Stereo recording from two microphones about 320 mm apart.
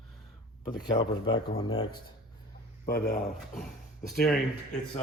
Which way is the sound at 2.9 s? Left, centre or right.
Left.